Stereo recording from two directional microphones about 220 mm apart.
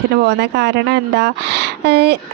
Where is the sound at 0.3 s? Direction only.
50° right (ahead or behind).